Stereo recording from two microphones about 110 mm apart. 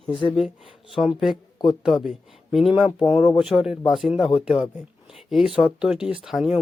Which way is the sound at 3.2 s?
55° left (ahead or behind).